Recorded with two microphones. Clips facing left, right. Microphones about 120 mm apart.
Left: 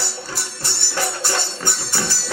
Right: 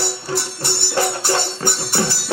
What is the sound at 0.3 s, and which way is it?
Music, 25° right (ahead or behind).